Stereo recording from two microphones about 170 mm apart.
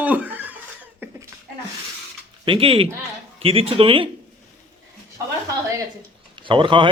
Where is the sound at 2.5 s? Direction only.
35° right (ahead or behind).